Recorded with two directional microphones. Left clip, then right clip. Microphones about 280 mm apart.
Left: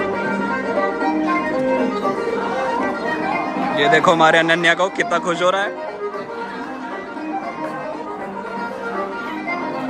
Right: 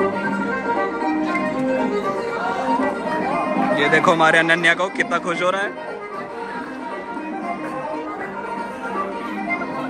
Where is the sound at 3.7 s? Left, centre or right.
Centre.